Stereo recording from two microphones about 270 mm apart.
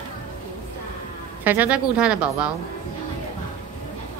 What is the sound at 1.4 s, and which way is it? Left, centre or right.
A woman's voice, centre.